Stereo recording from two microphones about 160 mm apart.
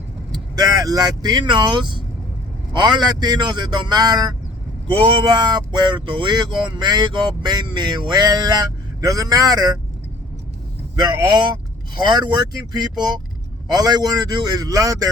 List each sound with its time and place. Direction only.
0.3 s speech: 25° right (ahead or behind)
10.9 s speech: 25° right (ahead or behind)